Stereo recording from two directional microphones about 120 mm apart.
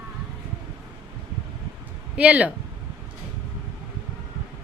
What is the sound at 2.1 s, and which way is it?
Speech, 10° right (ahead or behind).